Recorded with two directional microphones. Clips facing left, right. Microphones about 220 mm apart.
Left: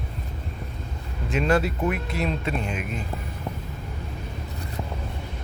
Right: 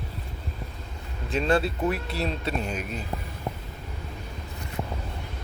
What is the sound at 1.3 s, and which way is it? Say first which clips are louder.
Speech: left 1 dB; 30° right (ahead or behind).